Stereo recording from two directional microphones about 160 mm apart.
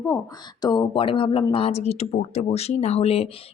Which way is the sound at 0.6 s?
25° left (ahead or behind).